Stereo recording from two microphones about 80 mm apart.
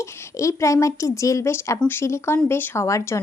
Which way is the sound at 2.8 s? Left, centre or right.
Left.